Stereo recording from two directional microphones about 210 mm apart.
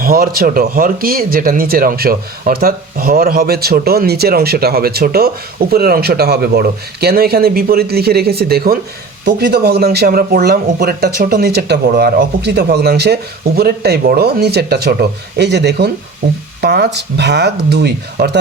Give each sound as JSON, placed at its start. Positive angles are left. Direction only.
{"t": 0.0, "sound": "speech", "side_deg": -45}